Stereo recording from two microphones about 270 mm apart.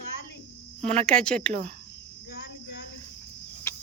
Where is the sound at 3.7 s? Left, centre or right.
Centre.